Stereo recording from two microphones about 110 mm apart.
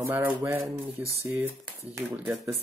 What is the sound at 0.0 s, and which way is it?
Speech, 15° right (ahead or behind).